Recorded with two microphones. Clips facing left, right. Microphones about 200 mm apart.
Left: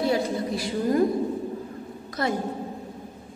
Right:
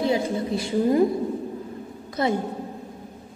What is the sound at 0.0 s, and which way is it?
A woman's voice, 20° right (ahead or behind).